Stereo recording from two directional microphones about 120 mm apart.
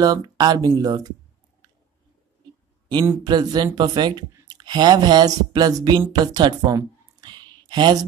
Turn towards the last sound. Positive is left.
turn(degrees=-35)  # may be behind; listen again after turning